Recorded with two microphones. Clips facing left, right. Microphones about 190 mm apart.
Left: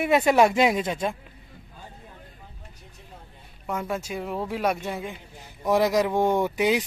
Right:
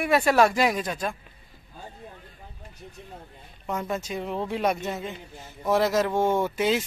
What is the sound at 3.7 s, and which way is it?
A man's voice, 5° left (ahead or behind).